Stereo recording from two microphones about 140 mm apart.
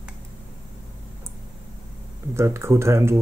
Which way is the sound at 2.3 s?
20° right (ahead or behind).